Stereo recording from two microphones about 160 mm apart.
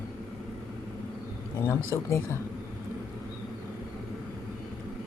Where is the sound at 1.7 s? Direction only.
15° left (ahead or behind).